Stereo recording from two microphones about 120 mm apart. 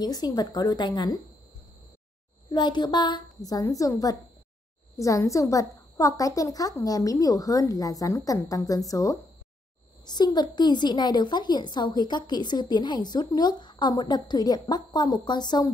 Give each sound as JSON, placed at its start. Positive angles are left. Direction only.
{"t": 0.0, "sound": "a woman's voice", "side_deg": 35}
{"t": 2.5, "sound": "a woman's voice", "side_deg": 35}